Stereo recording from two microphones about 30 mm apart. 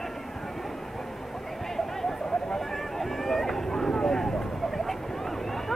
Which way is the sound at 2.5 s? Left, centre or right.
Centre.